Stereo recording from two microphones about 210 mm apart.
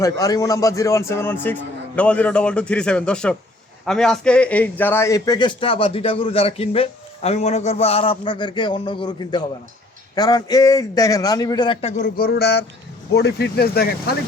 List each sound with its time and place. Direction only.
0.0 s a man's voice: 15° left (ahead or behind)
11.9 s speech: 45° left (ahead or behind)